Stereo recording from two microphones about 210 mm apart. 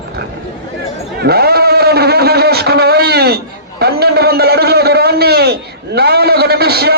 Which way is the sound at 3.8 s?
50° right (ahead or behind).